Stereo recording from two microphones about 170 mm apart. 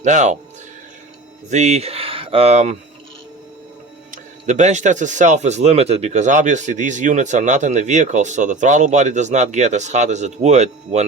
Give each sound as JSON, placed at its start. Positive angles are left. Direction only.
{"t": 0.0, "sound": "speech", "side_deg": -45}
{"t": 1.5, "sound": "speech", "side_deg": -40}
{"t": 4.1, "sound": "speech", "side_deg": -45}